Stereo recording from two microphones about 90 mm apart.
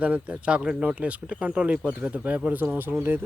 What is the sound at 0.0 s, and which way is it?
Speech, 15° right (ahead or behind).